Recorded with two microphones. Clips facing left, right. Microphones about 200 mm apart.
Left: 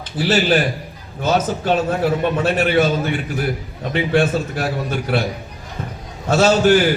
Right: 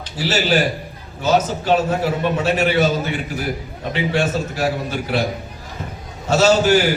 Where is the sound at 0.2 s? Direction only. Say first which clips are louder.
Left 2 dB; 50° left (ahead or behind).